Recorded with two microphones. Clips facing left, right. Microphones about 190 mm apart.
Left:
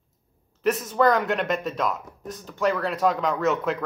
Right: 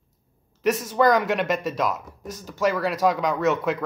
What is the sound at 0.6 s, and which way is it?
Speech, centre (ahead or behind).